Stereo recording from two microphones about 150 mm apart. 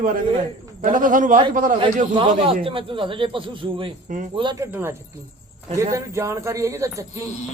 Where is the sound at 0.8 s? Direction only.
65° right (ahead or behind).